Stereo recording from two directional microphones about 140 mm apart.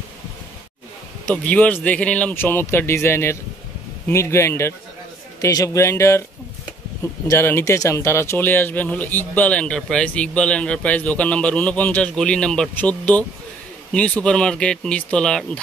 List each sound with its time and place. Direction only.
1.2 s speech: 10° left (ahead or behind)
7.2 s speech: 15° left (ahead or behind)